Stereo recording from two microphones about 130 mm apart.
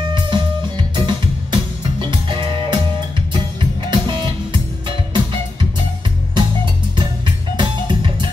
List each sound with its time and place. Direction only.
0.1 s music: 35° right (ahead or behind)